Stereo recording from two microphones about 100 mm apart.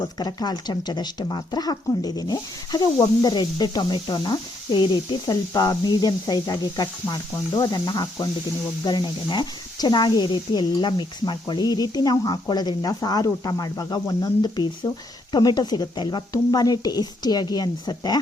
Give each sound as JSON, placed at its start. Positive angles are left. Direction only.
{"t": 0.0, "sound": "speech", "side_deg": 40}